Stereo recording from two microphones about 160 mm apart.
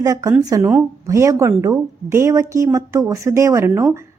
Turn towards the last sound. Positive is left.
turn(degrees=-20)  # may be behind; listen again after turning